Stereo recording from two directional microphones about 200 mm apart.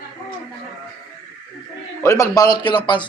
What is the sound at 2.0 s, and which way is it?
A man's voice, 15° left (ahead or behind).